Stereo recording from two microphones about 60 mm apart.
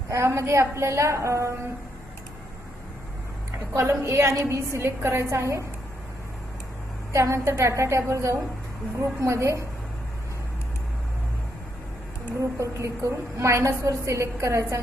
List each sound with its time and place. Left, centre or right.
0.1 s a woman's voice: right
3.8 s a woman's voice: right
7.1 s a woman's voice: right
12.4 s a woman's voice: right